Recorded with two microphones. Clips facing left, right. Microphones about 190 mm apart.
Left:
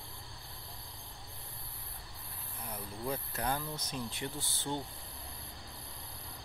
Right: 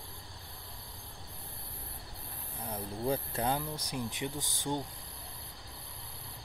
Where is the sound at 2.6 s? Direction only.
30° right (ahead or behind).